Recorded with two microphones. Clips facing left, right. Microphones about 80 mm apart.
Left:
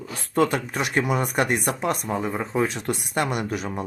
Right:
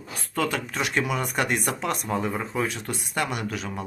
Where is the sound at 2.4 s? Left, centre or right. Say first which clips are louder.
Left 4 dB; left.